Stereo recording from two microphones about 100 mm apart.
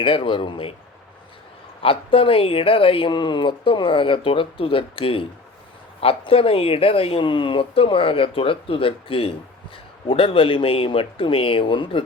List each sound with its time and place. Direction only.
0.0 s speech: 60° left (ahead or behind)
1.8 s speech: 65° left (ahead or behind)